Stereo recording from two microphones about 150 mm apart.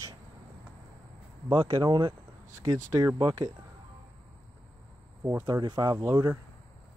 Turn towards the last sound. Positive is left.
turn(degrees=-25)  # may be behind; listen again after turning